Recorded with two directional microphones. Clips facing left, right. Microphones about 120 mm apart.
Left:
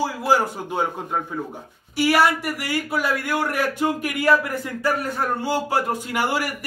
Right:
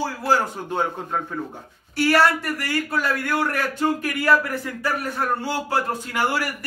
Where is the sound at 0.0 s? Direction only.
10° left (ahead or behind).